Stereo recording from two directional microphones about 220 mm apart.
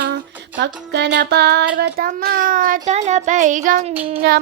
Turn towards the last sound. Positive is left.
turn(degrees=-45)  # may be behind; listen again after turning